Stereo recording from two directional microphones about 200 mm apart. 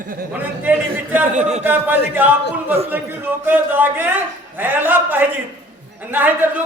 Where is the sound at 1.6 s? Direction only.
10° right (ahead or behind).